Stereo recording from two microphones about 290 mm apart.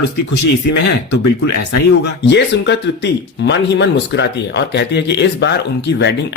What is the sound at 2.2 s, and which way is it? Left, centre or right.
Speech, left.